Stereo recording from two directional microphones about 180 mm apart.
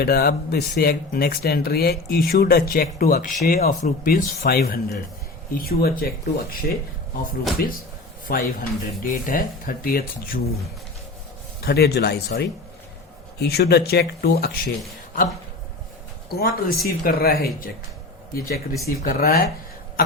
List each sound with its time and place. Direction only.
0.0 s speech: 60° left (ahead or behind)
8.3 s speech: 55° left (ahead or behind)
11.6 s speech: 65° left (ahead or behind)
16.3 s speech: 55° left (ahead or behind)